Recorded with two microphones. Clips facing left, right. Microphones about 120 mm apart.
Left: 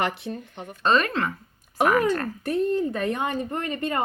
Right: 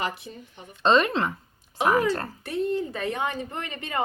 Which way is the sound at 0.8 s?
25° right (ahead or behind).